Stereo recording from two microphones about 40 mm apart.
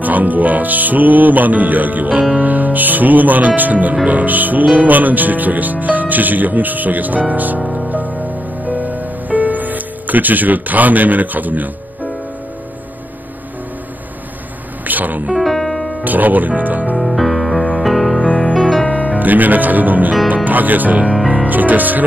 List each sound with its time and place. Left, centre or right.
0.0 s speech: right
7.9 s music: right
14.9 s speech: right
15.3 s music: centre
16.0 s speech: right
16.9 s music: centre
18.2 s music: left
19.1 s speech: right